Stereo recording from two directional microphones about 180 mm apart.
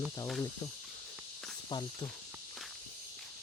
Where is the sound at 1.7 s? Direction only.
25° left (ahead or behind).